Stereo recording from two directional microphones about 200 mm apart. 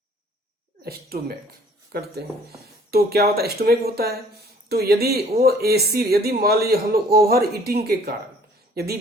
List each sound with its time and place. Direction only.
0.9 s speech: 50° right (ahead or behind)